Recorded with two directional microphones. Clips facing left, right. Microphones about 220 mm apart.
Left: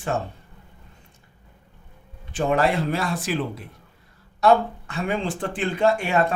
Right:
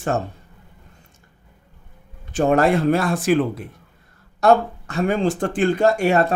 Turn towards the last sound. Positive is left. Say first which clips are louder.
# right 4 dB
turn(degrees=-40)  # may be behind; listen again after turning